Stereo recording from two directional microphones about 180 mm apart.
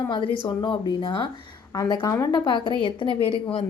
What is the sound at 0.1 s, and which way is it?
A woman's voice, 30° left (ahead or behind).